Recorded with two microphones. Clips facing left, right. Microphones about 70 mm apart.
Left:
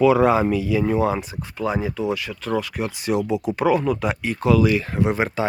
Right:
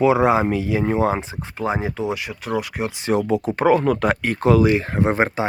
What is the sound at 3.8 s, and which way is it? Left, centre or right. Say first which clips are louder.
Speech: right 3 dB; right.